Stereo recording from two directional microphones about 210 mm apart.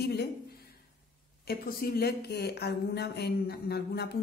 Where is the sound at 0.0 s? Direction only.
50° left (ahead or behind).